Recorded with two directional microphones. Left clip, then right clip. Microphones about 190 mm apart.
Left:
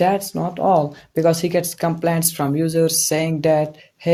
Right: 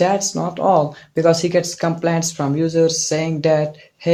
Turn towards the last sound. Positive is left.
turn(degrees=45)  # may be behind; listen again after turning